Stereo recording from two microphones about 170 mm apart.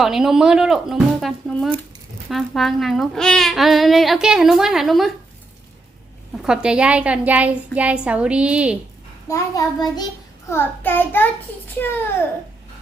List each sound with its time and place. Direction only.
0.0 s speech: centre (ahead or behind)
6.4 s a woman's voice: 5° right (ahead or behind)
9.3 s child singing: 20° left (ahead or behind)
10.5 s child singing: 10° left (ahead or behind)